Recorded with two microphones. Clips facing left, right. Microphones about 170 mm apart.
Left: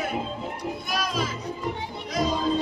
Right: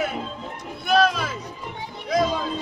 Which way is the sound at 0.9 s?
65° right (ahead or behind).